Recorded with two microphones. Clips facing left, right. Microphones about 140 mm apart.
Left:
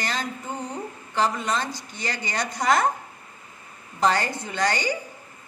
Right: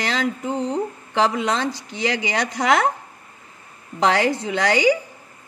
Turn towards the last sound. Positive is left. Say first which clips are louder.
# right 7 dB
turn(degrees=-90)